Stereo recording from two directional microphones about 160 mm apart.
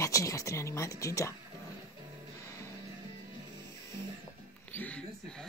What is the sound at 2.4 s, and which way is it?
Music, 20° left (ahead or behind).